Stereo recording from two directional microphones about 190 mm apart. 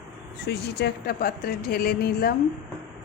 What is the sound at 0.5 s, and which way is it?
A woman's voice, 60° left (ahead or behind).